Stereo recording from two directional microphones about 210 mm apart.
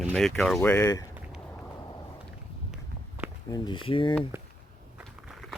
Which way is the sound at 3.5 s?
20° left (ahead or behind).